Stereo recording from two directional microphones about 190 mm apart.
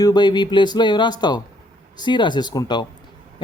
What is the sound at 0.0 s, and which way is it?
Speech, 20° left (ahead or behind).